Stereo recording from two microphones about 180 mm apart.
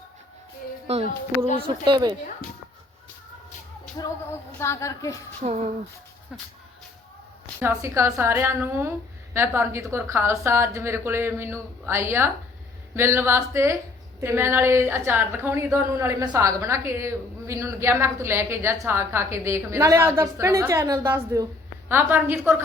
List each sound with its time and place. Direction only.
0.9 s speech: 35° right (ahead or behind)
3.9 s speech: 20° left (ahead or behind)
5.4 s speech: 40° right (ahead or behind)
7.6 s a woman's voice: 15° right (ahead or behind)